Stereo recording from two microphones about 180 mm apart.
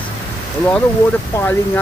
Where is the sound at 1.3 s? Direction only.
15° left (ahead or behind).